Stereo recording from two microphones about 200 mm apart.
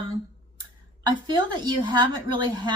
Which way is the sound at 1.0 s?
20° right (ahead or behind).